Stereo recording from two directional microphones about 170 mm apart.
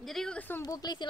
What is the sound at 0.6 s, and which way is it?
Speech, 25° left (ahead or behind).